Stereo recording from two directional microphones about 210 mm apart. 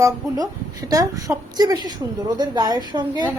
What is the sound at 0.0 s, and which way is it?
A woman's voice, 15° right (ahead or behind).